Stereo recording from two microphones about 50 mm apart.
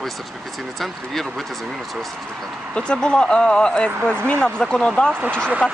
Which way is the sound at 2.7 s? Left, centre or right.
Centre.